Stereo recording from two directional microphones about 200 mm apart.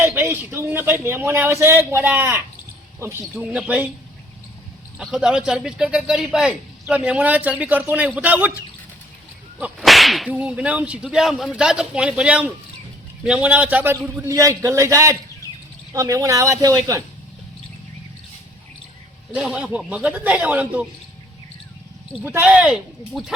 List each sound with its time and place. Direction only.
0.0 s a man's voice: 10° right (ahead or behind)
4.9 s a man's voice: 5° right (ahead or behind)
9.6 s a man's voice: 5° right (ahead or behind)
19.3 s a man's voice: 5° right (ahead or behind)
22.2 s a man's voice: 10° right (ahead or behind)